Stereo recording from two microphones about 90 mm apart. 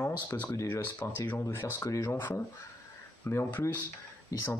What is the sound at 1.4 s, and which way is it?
Speech, 35° left (ahead or behind).